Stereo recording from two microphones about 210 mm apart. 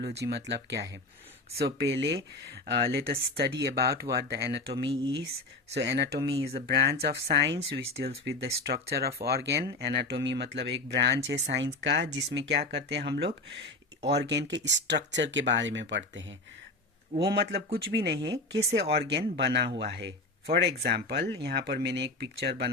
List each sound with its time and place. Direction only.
0.0 s speech: 50° right (ahead or behind)
4.9 s speech: 20° right (ahead or behind)
5.7 s speech: 55° right (ahead or behind)
6.1 s speech: 20° right (ahead or behind)
6.7 s speech: 50° right (ahead or behind)
17.9 s speech: 55° right (ahead or behind)